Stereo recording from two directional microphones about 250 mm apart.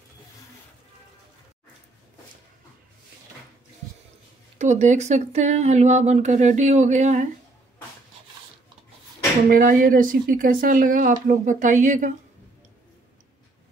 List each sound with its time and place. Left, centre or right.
4.6 s speech: right
9.5 s speech: right